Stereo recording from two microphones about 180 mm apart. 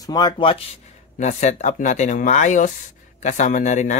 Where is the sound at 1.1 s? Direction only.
40° left (ahead or behind).